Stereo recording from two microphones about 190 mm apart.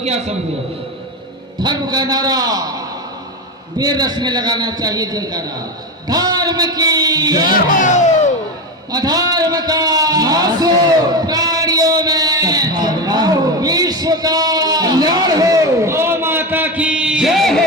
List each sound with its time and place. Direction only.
0.0 s a man's voice: 35° right (ahead or behind)
1.6 s a man's voice: 20° right (ahead or behind)
3.8 s a man's voice: 20° right (ahead or behind)
7.5 s speech: 40° left (ahead or behind)
8.9 s a sound: 20° right (ahead or behind); by 17.6 s centre (ahead or behind)